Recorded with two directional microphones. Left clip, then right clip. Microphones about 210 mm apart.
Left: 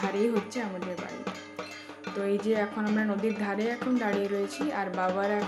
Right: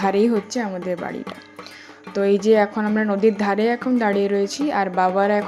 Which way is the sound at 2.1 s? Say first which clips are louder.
Right 12 dB; 30° right (ahead or behind).